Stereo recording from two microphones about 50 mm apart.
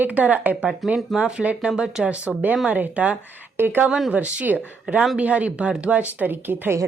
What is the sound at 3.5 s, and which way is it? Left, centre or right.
Speech, right.